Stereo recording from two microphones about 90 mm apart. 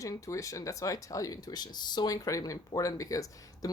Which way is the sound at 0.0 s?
40° left (ahead or behind).